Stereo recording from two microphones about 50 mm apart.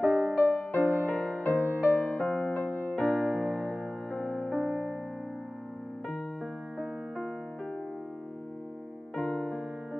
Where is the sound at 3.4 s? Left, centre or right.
Centre.